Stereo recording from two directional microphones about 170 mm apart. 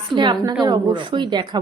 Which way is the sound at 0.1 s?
25° right (ahead or behind).